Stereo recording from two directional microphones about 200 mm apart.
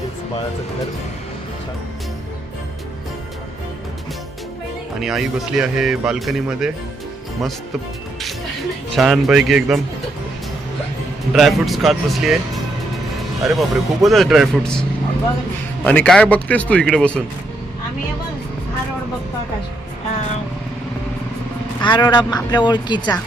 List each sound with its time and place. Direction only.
4.9 s speech: centre (ahead or behind)
9.0 s speech: centre (ahead or behind)
11.3 s speech: centre (ahead or behind)
13.4 s speech: centre (ahead or behind)
15.8 s speech: 5° left (ahead or behind)
21.8 s speech: 20° left (ahead or behind)